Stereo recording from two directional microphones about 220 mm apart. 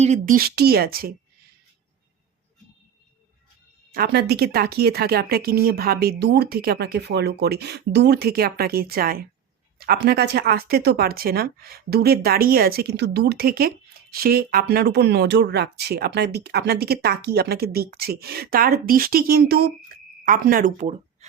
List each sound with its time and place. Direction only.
0.0 s speech: 35° right (ahead or behind)
3.9 s speech: 45° right (ahead or behind)